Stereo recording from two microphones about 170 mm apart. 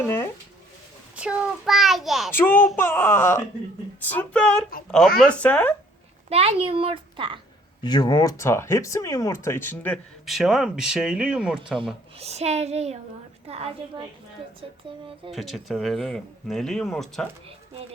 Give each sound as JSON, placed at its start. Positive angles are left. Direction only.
{"t": 1.1, "sound": "a child's voice", "side_deg": -5}
{"t": 2.3, "sound": "speech", "side_deg": 15}
{"t": 6.2, "sound": "a woman's voice", "side_deg": -35}
{"t": 7.8, "sound": "speech", "side_deg": 25}
{"t": 12.2, "sound": "a woman's voice", "side_deg": -40}
{"t": 15.3, "sound": "speech", "side_deg": 0}